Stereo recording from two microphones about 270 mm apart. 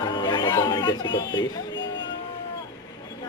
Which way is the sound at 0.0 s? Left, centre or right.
Centre.